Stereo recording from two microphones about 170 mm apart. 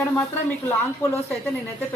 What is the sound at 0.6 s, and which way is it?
Speech, 15° left (ahead or behind).